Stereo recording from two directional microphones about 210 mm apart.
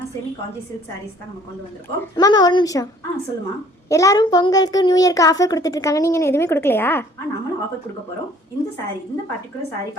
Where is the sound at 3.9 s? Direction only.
15° left (ahead or behind).